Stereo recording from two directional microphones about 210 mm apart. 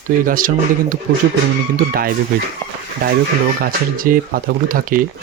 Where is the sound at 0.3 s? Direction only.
40° right (ahead or behind).